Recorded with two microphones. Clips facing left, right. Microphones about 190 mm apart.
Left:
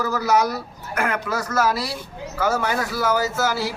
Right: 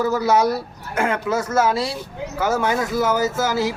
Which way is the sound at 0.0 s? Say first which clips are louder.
Right 3 dB; 25° right (ahead or behind).